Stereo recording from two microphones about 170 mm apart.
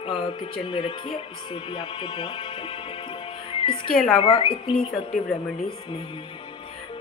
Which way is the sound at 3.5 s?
30° left (ahead or behind).